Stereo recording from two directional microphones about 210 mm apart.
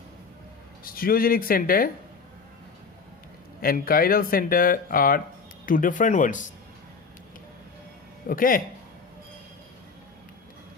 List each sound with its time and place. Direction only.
0.9 s speech: 45° left (ahead or behind)
3.6 s speech: 45° left (ahead or behind)
8.3 s speech: 40° left (ahead or behind)